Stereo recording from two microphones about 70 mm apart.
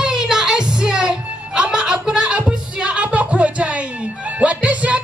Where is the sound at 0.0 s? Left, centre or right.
Centre.